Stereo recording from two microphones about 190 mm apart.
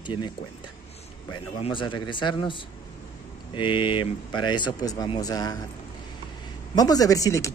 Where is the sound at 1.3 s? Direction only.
25° left (ahead or behind).